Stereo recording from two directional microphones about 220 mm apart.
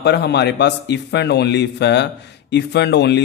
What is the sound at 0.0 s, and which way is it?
Speech, 50° left (ahead or behind).